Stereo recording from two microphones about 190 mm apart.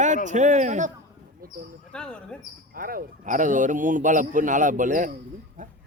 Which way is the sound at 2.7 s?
50° right (ahead or behind).